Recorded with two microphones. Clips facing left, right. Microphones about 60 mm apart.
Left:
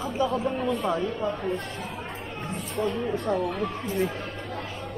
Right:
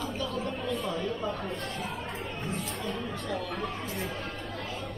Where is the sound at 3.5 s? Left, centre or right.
Centre.